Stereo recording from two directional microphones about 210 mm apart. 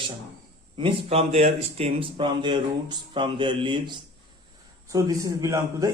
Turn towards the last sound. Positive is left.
turn(degrees=-15)  # may be behind; listen again after turning